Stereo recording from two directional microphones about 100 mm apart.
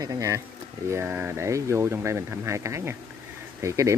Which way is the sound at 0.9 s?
20° right (ahead or behind).